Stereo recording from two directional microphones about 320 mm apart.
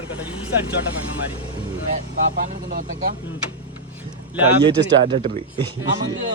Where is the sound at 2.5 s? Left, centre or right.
Right.